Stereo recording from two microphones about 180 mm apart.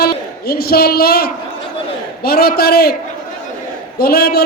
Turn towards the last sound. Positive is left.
turn(degrees=60)  # may be behind; listen again after turning